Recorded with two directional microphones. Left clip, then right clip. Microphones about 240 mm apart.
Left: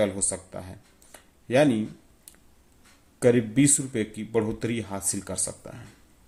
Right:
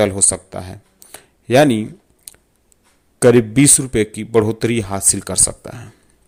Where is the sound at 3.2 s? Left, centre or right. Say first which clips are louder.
Right 10 dB; right.